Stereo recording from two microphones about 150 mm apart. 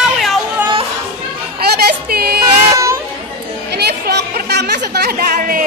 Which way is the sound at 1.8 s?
90° right.